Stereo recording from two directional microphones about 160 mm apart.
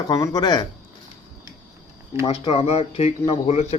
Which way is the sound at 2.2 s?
35° left (ahead or behind).